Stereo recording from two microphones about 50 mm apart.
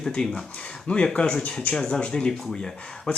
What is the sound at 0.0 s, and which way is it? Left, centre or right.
Speech, centre.